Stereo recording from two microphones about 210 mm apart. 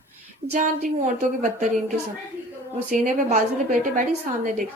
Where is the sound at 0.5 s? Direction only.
35° right (ahead or behind).